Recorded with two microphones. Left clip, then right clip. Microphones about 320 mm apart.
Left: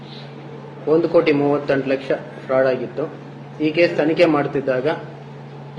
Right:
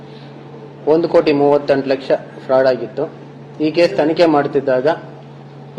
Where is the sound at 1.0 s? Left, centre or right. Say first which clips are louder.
Right 2 dB; right.